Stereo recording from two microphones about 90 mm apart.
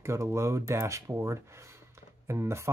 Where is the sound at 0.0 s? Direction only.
30° right (ahead or behind).